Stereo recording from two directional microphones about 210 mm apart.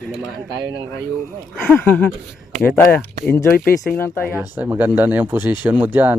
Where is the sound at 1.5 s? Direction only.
5° left (ahead or behind).